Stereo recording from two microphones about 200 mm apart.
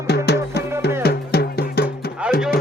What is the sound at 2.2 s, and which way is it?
Music, 5° right (ahead or behind).